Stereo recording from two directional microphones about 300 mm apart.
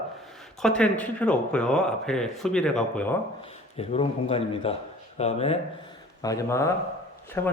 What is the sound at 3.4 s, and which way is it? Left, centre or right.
A man's voice, centre.